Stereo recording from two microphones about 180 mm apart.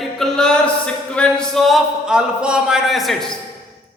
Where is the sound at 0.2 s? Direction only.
5° left (ahead or behind).